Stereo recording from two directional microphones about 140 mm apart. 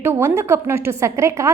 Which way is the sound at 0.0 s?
20° right (ahead or behind).